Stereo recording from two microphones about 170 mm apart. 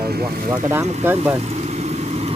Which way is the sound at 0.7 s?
10° right (ahead or behind).